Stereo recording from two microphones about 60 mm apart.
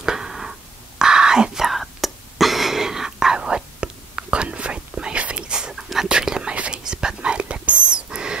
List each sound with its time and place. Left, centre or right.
0.0 s whispering: centre